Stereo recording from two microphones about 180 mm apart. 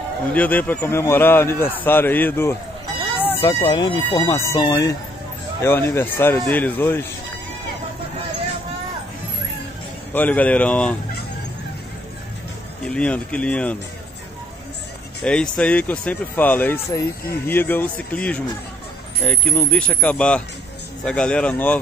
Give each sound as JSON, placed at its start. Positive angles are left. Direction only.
{"t": 0.3, "sound": "speech", "side_deg": 10}
{"t": 10.1, "sound": "speech", "side_deg": 10}
{"t": 12.8, "sound": "speech", "side_deg": 5}
{"t": 15.2, "sound": "speech", "side_deg": 5}